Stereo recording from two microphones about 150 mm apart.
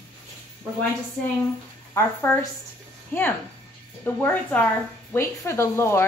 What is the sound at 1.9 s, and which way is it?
A woman's voice, 15° left (ahead or behind).